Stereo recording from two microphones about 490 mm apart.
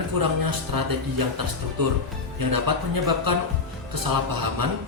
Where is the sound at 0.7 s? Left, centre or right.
Right.